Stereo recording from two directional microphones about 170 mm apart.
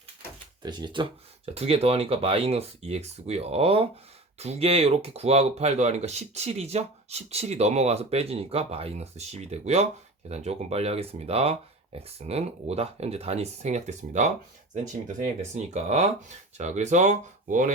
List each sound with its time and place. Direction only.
0.6 s speech: 25° right (ahead or behind); by 14.3 s 45° right (ahead or behind)
15.5 s speech: 40° right (ahead or behind)